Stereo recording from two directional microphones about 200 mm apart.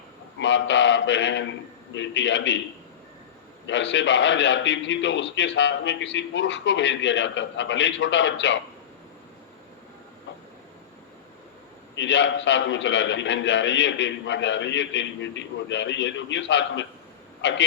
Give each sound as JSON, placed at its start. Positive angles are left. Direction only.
{"t": 0.3, "sound": "a man's voice", "side_deg": 65}
{"t": 3.7, "sound": "a man's voice", "side_deg": 65}
{"t": 11.9, "sound": "a man's voice", "side_deg": 65}